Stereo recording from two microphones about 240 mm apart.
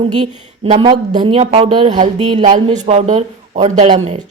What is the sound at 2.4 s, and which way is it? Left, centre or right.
Speech, right.